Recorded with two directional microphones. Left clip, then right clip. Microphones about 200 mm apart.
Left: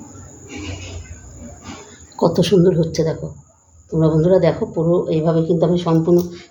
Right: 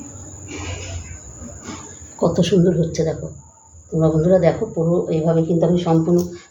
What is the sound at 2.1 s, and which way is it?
Speech, 40° left (ahead or behind).